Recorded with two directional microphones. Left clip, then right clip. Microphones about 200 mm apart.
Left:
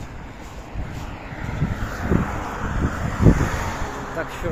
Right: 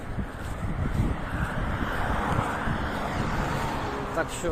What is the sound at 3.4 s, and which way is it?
Vehicle, 50° left (ahead or behind).